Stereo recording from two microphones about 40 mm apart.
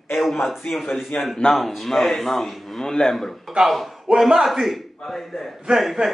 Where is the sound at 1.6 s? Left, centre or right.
Centre.